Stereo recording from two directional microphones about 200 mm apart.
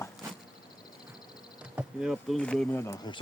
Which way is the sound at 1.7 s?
5° right (ahead or behind).